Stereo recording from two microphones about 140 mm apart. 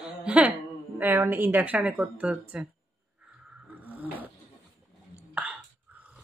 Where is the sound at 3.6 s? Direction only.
10° right (ahead or behind).